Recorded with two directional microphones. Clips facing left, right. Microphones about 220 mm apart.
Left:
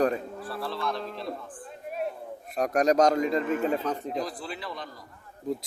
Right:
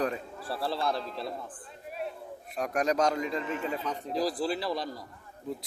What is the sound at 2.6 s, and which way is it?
A man's voice, 40° left (ahead or behind).